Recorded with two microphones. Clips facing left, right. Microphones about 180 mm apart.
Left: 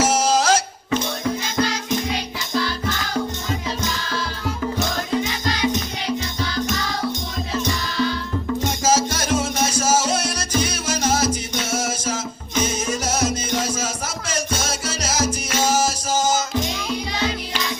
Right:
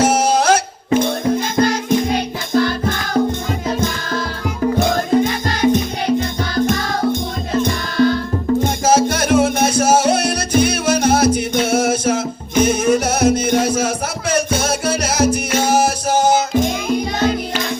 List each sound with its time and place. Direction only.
0.0 s music: 60° right (ahead or behind)